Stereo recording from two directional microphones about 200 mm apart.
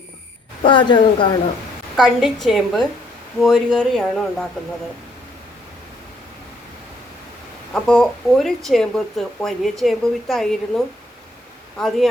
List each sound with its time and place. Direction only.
0.6 s speech: 25° left (ahead or behind)
2.0 s speech: centre (ahead or behind)
7.7 s speech: centre (ahead or behind)